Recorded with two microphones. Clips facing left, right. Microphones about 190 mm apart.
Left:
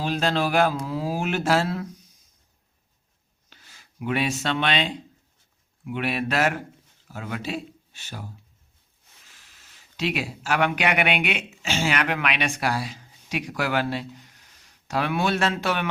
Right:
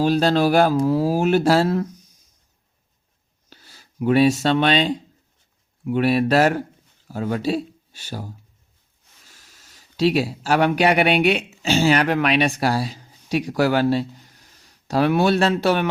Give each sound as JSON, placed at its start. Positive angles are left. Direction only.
{"t": 0.0, "sound": "speech", "side_deg": -40}
{"t": 3.5, "sound": "speech", "side_deg": -35}